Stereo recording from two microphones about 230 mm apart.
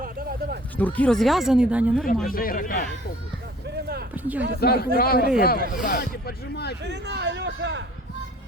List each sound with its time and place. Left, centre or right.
0.0 s a sound: right
0.8 s speech: centre
2.2 s speech: left
4.1 s speech: centre
4.6 s speech: left
6.8 s a man's voice: right